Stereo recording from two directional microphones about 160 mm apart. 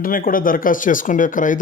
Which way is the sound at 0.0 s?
60° left (ahead or behind).